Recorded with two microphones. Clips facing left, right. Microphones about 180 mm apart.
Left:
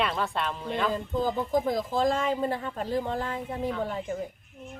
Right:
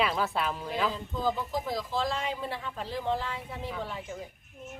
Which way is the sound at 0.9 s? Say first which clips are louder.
Left 3 dB; 50° left (ahead or behind).